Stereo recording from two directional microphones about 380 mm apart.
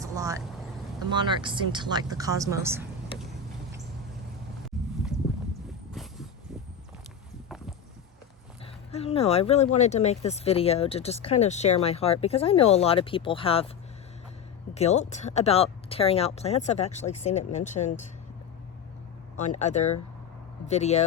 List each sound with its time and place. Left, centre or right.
0.0 s vehicle: centre
1.1 s speech: centre
5.1 s clip-clop: centre
5.9 s vehicle: centre
8.9 s speech: centre
14.8 s speech: centre
19.4 s speech: centre